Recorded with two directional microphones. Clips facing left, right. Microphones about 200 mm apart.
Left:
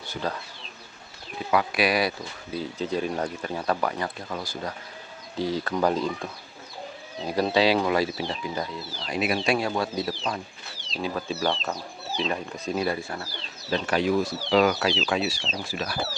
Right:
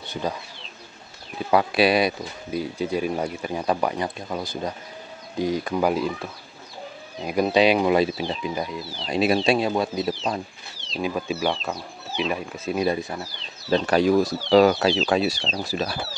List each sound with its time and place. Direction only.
0.1 s speech: 15° right (ahead or behind)
1.5 s speech: 30° right (ahead or behind); by 12.7 s 5° right (ahead or behind)
12.7 s speech: 20° right (ahead or behind)
13.7 s speech: 35° right (ahead or behind)